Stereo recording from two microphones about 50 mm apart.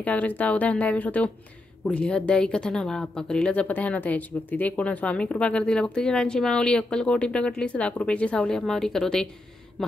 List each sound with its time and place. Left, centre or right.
0.0 s speech: left
1.9 s speech: left
3.5 s a woman's voice: left
8.5 s speech: centre
9.8 s a sound: centre